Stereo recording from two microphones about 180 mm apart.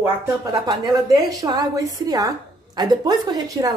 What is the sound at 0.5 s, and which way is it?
A woman's voice, 20° right (ahead or behind).